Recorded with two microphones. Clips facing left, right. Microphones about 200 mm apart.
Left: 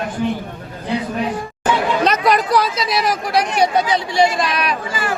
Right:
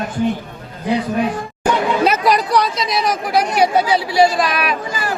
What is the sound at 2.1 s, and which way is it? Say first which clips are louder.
A man's voice: even; centre (ahead or behind).